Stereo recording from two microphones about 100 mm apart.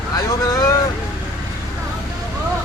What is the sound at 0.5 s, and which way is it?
Speech, 35° left (ahead or behind).